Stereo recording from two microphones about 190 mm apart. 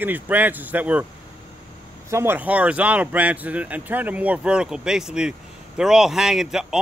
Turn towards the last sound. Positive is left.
turn(degrees=0)  # may be behind; listen again after turning